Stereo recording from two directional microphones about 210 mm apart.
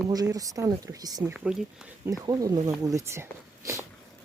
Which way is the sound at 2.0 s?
15° right (ahead or behind).